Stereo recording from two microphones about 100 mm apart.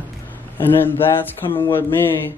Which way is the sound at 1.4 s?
55° left (ahead or behind).